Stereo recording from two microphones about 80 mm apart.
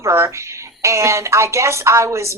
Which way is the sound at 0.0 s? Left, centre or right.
Right.